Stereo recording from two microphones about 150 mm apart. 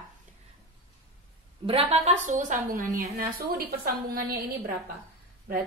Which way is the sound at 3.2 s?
80° right.